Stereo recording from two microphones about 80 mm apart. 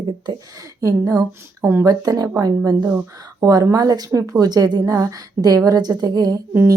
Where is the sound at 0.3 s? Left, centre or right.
Right.